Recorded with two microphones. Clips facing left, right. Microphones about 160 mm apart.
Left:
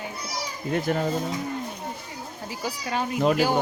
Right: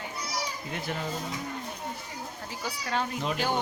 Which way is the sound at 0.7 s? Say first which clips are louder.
Left 11 dB; 50° left (ahead or behind).